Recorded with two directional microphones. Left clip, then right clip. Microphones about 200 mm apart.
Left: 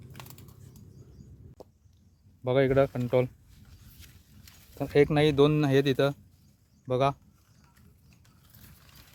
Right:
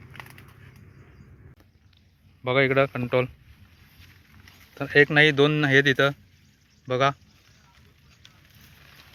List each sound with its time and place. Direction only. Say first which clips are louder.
2.4 s speech: right 3 dB; 10° left (ahead or behind)
4.8 s speech: right 6 dB; 5° left (ahead or behind)